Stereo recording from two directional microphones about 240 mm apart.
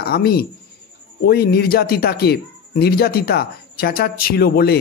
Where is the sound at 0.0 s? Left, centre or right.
Left.